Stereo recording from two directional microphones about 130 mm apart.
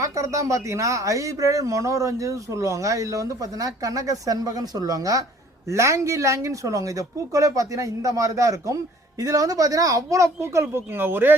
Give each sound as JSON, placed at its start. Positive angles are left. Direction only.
{"t": 0.0, "sound": "speech", "side_deg": -25}